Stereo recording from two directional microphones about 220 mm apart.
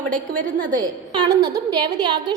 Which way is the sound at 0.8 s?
20° right (ahead or behind).